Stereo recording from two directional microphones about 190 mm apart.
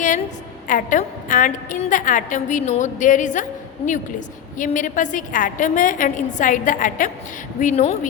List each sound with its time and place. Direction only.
0.7 s a woman's voice: 45° left (ahead or behind)
4.5 s a woman's voice: 40° left (ahead or behind)